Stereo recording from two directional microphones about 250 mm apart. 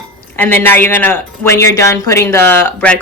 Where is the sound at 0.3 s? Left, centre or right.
Centre.